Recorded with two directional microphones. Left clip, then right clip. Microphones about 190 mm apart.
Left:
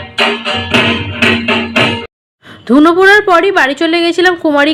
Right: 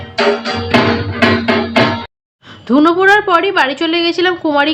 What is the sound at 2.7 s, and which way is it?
A woman's voice, 20° left (ahead or behind).